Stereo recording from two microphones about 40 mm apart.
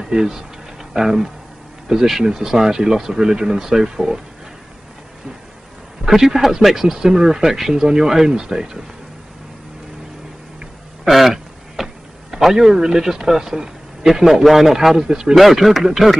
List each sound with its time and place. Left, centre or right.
0.0 s speech: centre
6.0 s speech: centre
11.1 s speech: centre
15.0 s speech: centre
15.3 s speech: centre